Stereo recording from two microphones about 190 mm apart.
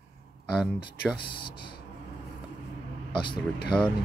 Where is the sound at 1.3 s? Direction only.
25° left (ahead or behind).